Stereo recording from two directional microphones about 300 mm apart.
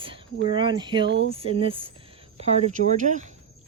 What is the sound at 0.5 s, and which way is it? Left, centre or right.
Speech, centre.